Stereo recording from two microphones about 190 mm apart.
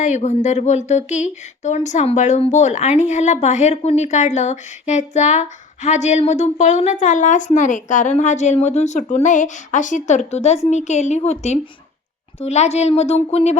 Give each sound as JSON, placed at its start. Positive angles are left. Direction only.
{"t": 0.0, "sound": "speech", "side_deg": 40}